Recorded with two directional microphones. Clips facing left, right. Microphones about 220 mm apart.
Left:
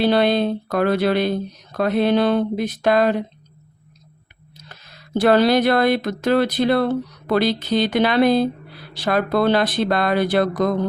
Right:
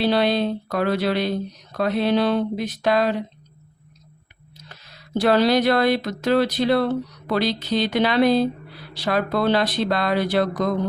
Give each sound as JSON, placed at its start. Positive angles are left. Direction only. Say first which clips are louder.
{"t": 0.0, "sound": "speech", "louder": "left 3 dB", "side_deg": 55}
{"t": 5.2, "sound": "speech", "louder": "left 2 dB", "side_deg": 50}